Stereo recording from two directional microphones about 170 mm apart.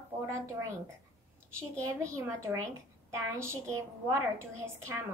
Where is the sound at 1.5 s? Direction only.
15° right (ahead or behind).